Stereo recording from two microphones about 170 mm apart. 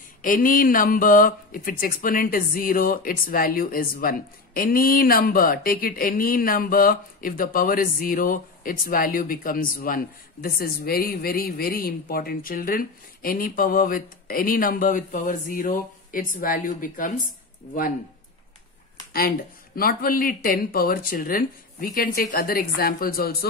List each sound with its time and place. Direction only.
0.2 s speech: 55° left (ahead or behind)
19.1 s speech: 60° left (ahead or behind)